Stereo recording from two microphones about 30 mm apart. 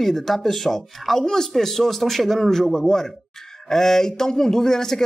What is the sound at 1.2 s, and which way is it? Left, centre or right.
Speech, centre.